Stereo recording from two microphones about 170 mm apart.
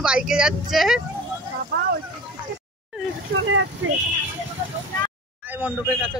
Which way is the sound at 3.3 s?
70° right (ahead or behind).